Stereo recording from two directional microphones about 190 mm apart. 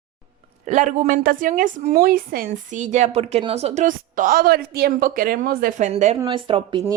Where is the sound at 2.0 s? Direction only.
50° right (ahead or behind).